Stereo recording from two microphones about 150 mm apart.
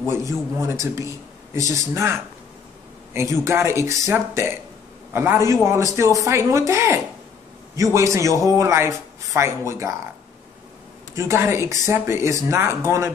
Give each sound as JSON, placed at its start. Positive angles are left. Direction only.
{"t": 0.0, "sound": "a man's voice", "side_deg": -20}
{"t": 11.1, "sound": "speech", "side_deg": -15}